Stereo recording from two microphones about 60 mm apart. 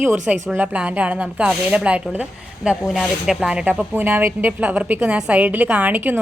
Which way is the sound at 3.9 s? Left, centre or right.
Right.